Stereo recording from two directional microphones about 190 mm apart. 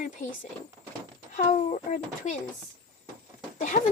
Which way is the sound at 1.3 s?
40° left (ahead or behind).